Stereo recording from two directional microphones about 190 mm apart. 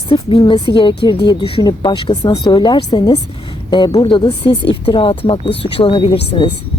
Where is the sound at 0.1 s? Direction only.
25° left (ahead or behind).